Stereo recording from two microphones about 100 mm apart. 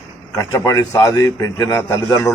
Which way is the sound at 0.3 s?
35° left (ahead or behind).